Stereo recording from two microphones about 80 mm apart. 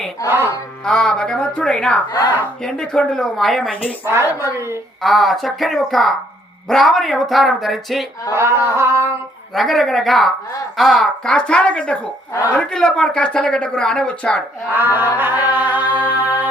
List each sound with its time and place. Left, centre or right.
0.3 s carnatic music: right
0.9 s speech: centre
4.0 s singing: right
5.0 s speech: centre
8.3 s singing: right
9.6 s speech: centre
14.7 s carnatic music: right